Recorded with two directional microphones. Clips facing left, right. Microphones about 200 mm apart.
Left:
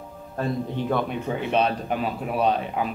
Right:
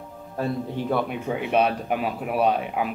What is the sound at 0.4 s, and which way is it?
Speech, 5° right (ahead or behind).